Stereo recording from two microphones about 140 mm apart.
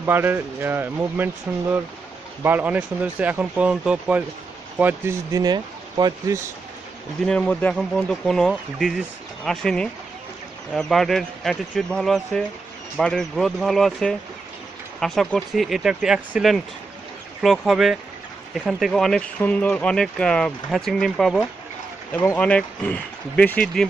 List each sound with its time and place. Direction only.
0.0 s speech: 15° right (ahead or behind)
7.2 s speech: 10° left (ahead or behind)
22.1 s speech: 15° left (ahead or behind)